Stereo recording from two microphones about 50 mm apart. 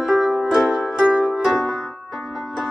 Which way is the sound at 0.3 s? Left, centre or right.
Centre.